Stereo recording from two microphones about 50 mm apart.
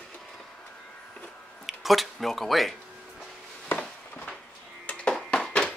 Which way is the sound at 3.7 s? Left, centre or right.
Left.